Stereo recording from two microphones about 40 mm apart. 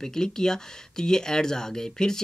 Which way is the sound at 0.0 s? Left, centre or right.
Centre.